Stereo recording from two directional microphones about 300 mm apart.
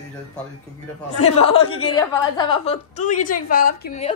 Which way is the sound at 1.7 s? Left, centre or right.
Left.